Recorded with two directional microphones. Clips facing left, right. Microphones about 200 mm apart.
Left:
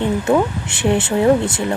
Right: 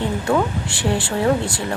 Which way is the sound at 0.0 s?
20° left (ahead or behind).